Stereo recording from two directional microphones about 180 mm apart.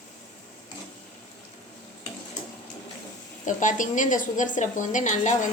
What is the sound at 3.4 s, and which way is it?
A woman's voice, 45° left (ahead or behind).